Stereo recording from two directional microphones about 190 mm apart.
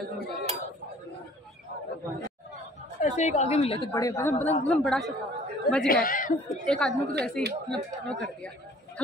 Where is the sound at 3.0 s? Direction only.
40° left (ahead or behind).